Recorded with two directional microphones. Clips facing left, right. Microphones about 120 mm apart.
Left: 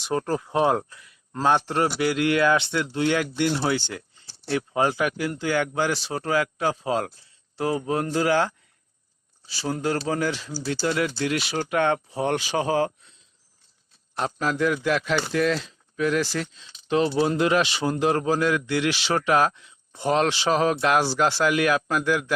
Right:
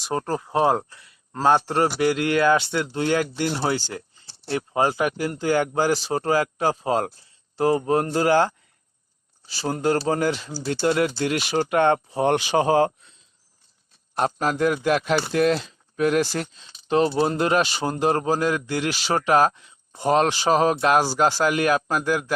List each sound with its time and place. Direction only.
0.0 s speech: 35° right (ahead or behind)
9.6 s speech: 45° right (ahead or behind)
10.3 s speech: 25° right (ahead or behind)
10.7 s speech: 45° right (ahead or behind)
14.2 s speech: 45° right (ahead or behind)